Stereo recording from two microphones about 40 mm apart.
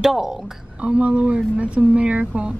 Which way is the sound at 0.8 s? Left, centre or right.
Right.